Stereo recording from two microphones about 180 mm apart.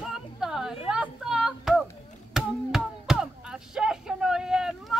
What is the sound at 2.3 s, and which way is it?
Chop, centre (ahead or behind).